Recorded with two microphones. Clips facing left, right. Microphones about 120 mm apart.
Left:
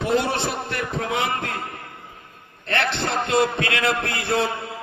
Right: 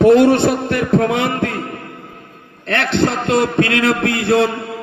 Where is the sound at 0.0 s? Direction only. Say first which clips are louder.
Right 12 dB; 55° right (ahead or behind).